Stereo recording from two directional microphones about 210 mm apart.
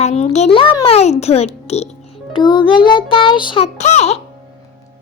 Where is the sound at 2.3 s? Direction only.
20° left (ahead or behind).